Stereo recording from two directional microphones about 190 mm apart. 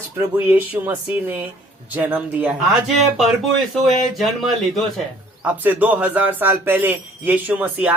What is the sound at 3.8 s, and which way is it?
Speech, centre (ahead or behind).